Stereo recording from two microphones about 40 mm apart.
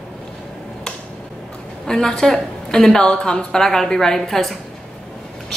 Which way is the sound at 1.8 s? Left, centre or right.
Centre.